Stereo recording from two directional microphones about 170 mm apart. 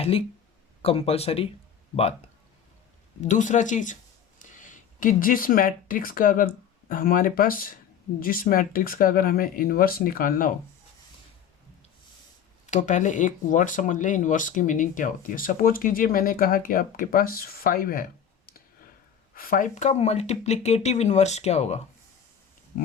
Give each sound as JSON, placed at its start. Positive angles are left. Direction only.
{"t": 0.0, "sound": "speech", "side_deg": 35}
{"t": 3.2, "sound": "speech", "side_deg": 45}
{"t": 12.6, "sound": "speech", "side_deg": 45}
{"t": 19.3, "sound": "speech", "side_deg": 55}
{"t": 22.7, "sound": "speech", "side_deg": 55}